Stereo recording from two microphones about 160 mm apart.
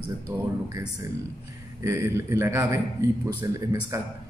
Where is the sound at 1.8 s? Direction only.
15° right (ahead or behind).